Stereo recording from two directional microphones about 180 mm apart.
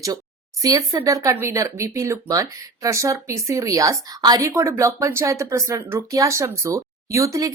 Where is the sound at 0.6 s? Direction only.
15° right (ahead or behind).